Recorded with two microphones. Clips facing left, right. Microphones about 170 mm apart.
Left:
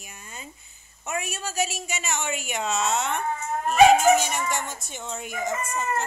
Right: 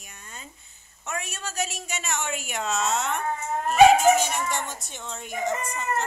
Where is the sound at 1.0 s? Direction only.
10° left (ahead or behind).